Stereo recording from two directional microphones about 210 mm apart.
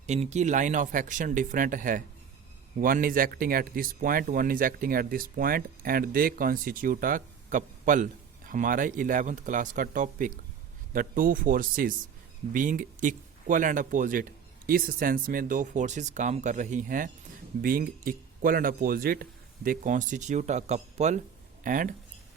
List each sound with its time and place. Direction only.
0.0 s speech: 30° right (ahead or behind)